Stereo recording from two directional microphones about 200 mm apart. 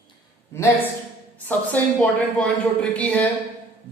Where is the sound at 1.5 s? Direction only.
5° left (ahead or behind).